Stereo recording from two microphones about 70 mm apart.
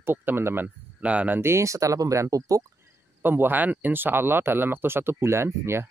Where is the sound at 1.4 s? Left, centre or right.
Right.